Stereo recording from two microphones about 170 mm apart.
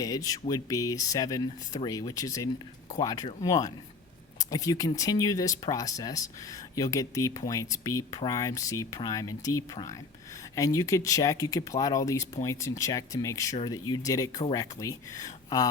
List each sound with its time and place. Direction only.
0.0 s speech: 20° left (ahead or behind)
10.5 s speech: 20° left (ahead or behind)